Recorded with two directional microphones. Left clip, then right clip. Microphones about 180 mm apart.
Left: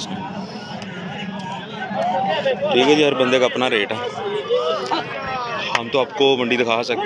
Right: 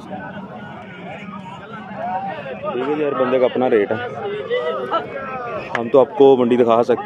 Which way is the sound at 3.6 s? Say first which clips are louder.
Right 3 dB; 20° right (ahead or behind).